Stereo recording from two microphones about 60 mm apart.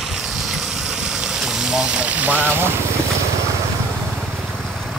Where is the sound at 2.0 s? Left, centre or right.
Right.